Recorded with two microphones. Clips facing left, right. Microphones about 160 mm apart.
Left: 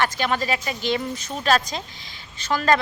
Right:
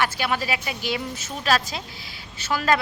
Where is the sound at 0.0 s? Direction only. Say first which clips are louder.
Left 2 dB; 10° right (ahead or behind).